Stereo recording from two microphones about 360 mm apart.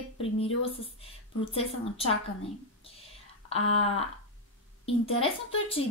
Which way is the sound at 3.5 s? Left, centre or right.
Centre.